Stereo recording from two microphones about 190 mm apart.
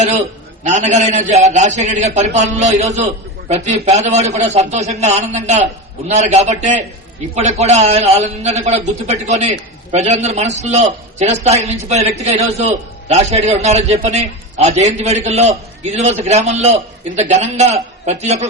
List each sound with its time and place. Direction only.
0.0 s a man's voice: 40° right (ahead or behind)